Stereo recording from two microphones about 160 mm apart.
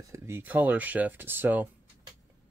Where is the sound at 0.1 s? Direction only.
15° right (ahead or behind).